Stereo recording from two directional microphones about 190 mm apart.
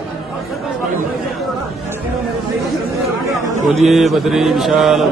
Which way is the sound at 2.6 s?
Centre (ahead or behind).